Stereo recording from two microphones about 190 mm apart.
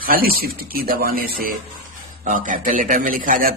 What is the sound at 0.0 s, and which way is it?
A man's voice, 50° right (ahead or behind).